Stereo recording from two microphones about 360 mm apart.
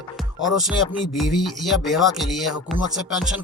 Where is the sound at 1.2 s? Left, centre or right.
Centre.